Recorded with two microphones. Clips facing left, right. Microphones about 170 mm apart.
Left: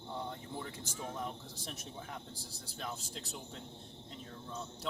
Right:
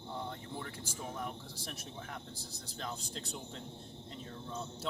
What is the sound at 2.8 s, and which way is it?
Speech, 5° left (ahead or behind).